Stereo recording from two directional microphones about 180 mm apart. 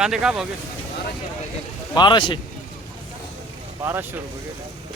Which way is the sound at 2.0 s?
25° left (ahead or behind).